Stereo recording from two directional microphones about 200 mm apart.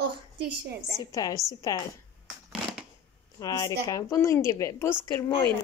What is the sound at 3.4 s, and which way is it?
A woman's voice, 15° left (ahead or behind).